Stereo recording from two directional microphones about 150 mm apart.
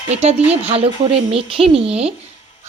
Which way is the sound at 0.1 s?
45° right (ahead or behind).